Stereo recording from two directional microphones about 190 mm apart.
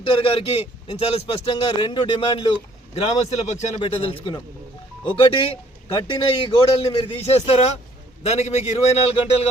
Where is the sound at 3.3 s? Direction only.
35° left (ahead or behind).